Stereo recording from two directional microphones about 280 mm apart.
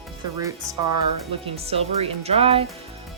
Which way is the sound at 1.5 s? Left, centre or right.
Right.